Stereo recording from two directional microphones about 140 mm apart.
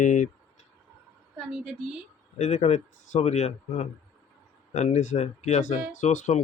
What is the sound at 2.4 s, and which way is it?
Speech, 55° left (ahead or behind).